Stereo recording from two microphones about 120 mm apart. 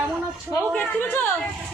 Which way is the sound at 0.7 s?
15° left (ahead or behind).